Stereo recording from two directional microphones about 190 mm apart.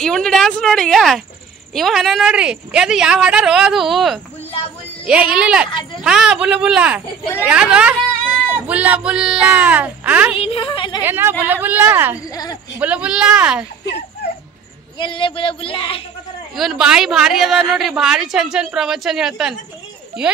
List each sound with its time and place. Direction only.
0.0 s speech: centre (ahead or behind)
10.3 s speech: 30° left (ahead or behind)
11.0 s speech: 10° right (ahead or behind)
12.3 s speech: 20° left (ahead or behind)
12.7 s speech: 5° right (ahead or behind)
15.0 s speech: 25° left (ahead or behind)
16.5 s speech: centre (ahead or behind)